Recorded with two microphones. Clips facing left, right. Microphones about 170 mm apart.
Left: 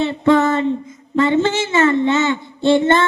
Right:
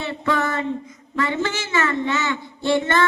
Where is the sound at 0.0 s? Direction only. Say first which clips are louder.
Left 9 dB; 25° left (ahead or behind).